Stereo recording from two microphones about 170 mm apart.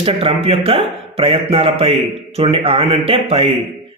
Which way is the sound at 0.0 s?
35° right (ahead or behind).